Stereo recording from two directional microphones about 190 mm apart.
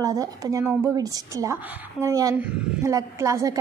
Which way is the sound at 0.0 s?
20° right (ahead or behind).